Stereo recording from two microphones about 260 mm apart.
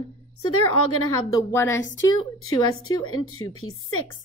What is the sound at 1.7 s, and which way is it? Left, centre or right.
A woman's voice, left.